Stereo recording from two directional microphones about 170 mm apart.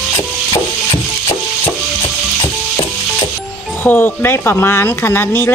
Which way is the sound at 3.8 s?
10° left (ahead or behind).